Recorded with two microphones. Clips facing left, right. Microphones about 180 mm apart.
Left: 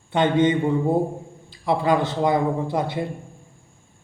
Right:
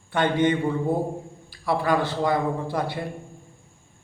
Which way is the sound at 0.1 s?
20° left (ahead or behind).